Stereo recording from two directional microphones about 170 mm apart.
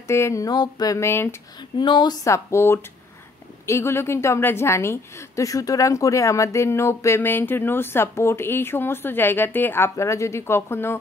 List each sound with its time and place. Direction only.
0.1 s a woman's voice: 15° left (ahead or behind)
1.8 s a woman's voice: 25° left (ahead or behind)